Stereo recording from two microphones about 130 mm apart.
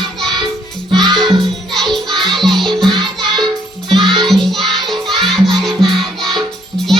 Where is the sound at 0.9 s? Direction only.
35° right (ahead or behind).